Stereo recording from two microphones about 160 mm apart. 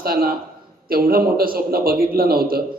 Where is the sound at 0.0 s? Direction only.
70° right (ahead or behind).